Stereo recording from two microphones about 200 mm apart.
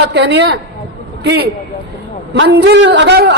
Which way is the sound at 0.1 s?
60° right (ahead or behind).